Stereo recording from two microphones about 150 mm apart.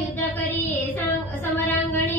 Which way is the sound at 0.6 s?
15° left (ahead or behind).